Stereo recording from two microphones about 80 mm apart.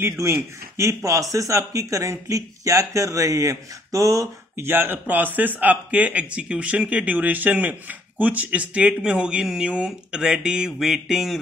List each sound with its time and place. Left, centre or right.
0.0 s a man's voice: right
4.6 s speech: right; by 11.3 s centre